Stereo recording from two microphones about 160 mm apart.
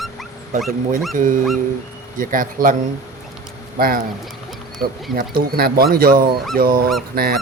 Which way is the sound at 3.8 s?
65° right (ahead or behind).